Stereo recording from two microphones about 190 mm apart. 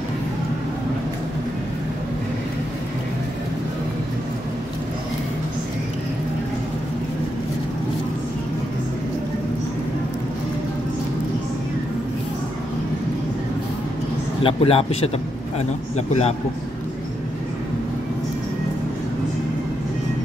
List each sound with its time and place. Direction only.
14.4 s speech: 30° left (ahead or behind)
16.1 s a man's voice: 35° left (ahead or behind)